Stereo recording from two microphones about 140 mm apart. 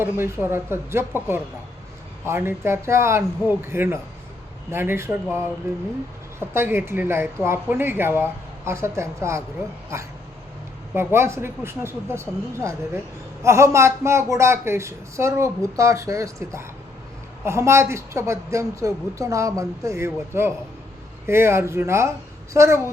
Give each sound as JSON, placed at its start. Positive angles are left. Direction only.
{"t": 0.0, "sound": "speech", "side_deg": -15}
{"t": 10.9, "sound": "speech", "side_deg": -20}